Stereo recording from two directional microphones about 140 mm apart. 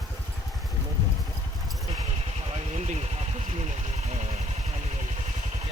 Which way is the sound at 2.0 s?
45° right (ahead or behind).